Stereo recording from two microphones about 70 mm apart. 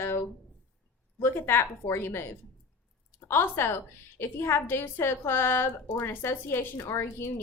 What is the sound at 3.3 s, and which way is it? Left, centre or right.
A woman's voice, left.